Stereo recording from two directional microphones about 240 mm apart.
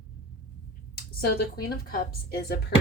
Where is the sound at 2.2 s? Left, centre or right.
Left.